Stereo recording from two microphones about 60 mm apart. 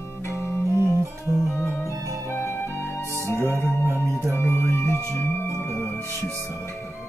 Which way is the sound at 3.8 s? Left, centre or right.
Right.